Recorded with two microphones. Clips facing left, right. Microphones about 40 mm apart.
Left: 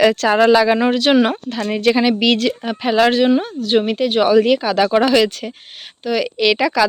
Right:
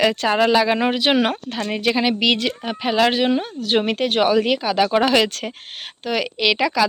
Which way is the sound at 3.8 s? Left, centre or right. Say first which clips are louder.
Left 3 dB; right.